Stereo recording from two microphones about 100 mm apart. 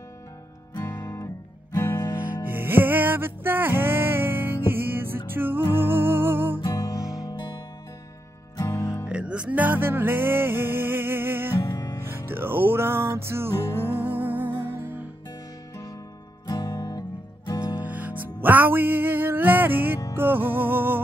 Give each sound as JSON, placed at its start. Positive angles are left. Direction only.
{"t": 1.8, "sound": "music", "side_deg": 25}
{"t": 2.1, "sound": "music", "side_deg": -20}
{"t": 6.6, "sound": "music", "side_deg": 40}
{"t": 7.0, "sound": "music", "side_deg": -5}
{"t": 7.2, "sound": "music", "side_deg": 45}
{"t": 9.1, "sound": "music", "side_deg": -10}
{"t": 11.6, "sound": "music", "side_deg": 35}
{"t": 12.0, "sound": "music", "side_deg": -25}
{"t": 16.4, "sound": "music", "side_deg": 45}
{"t": 17.8, "sound": "music", "side_deg": -15}